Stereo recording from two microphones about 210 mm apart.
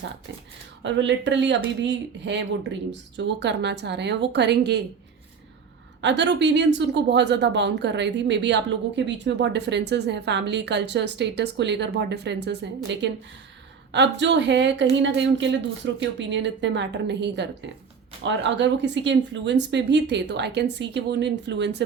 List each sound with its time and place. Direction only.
0.8 s speech: 60° right (ahead or behind)
6.0 s speech: 55° right (ahead or behind)